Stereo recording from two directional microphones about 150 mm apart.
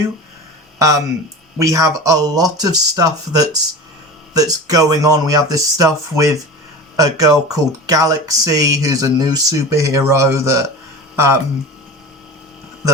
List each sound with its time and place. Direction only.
0.8 s speech: 20° right (ahead or behind)